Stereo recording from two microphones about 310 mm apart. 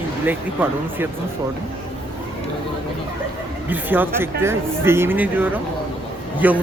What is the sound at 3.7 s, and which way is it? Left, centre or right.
Speech, centre.